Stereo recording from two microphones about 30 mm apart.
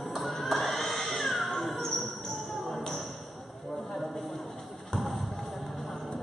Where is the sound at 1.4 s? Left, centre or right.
Centre.